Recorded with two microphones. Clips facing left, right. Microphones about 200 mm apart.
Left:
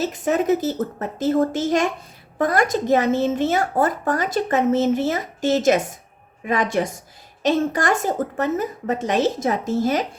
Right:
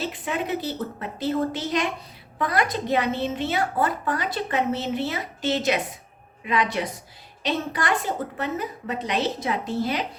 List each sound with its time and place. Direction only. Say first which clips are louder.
0.0 s a woman's voice: left 8 dB; 45° left (ahead or behind)